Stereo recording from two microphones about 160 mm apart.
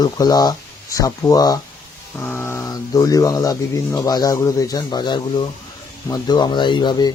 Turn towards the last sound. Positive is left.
turn(degrees=25)  # may be behind; listen again after turning